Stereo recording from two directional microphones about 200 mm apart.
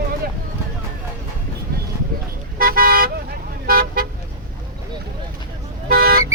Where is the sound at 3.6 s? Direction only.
45° right (ahead or behind).